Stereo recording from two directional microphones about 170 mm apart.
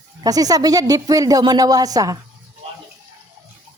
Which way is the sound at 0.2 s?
20° right (ahead or behind).